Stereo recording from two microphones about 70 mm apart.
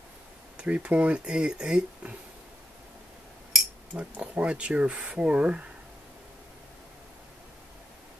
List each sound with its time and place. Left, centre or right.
0.6 s speech: centre
3.9 s speech: centre